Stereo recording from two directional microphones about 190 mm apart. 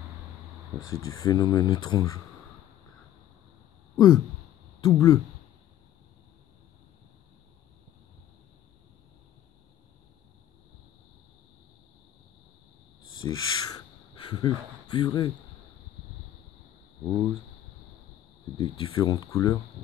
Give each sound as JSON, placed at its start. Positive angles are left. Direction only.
{"t": 0.8, "sound": "speech", "side_deg": 15}
{"t": 3.9, "sound": "speech", "side_deg": 15}
{"t": 13.2, "sound": "speech", "side_deg": 20}
{"t": 18.6, "sound": "speech", "side_deg": 25}